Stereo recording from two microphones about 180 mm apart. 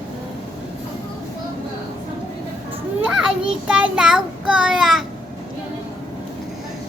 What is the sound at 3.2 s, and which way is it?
A child's voice, 5° right (ahead or behind).